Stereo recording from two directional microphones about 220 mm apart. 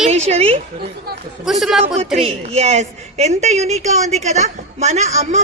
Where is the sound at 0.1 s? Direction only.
30° right (ahead or behind).